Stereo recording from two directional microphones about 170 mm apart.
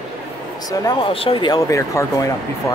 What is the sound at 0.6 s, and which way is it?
Speech, 20° left (ahead or behind).